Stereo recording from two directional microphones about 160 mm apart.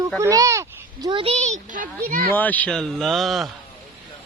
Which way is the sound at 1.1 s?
40° right (ahead or behind).